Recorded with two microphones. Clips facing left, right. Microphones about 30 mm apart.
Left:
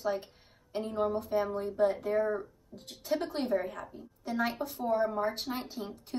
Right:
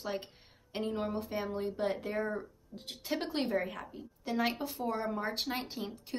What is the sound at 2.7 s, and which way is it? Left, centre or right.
Speech, right.